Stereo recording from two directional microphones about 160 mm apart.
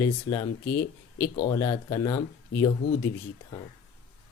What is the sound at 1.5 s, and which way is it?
Speech, 20° left (ahead or behind).